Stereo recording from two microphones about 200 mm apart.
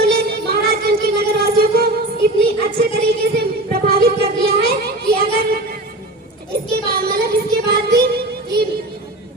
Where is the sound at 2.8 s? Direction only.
50° right (ahead or behind).